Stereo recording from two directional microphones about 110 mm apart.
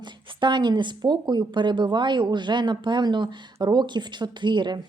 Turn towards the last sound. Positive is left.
turn(degrees=-45)  # may be behind; listen again after turning